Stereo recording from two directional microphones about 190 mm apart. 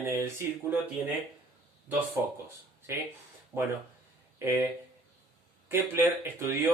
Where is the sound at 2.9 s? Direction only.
15° right (ahead or behind).